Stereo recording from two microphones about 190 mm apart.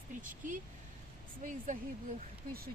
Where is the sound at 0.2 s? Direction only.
45° right (ahead or behind).